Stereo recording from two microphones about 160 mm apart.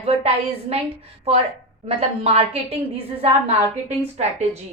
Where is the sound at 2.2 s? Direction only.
40° right (ahead or behind).